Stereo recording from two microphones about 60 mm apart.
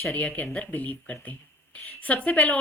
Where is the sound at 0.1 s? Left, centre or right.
Left.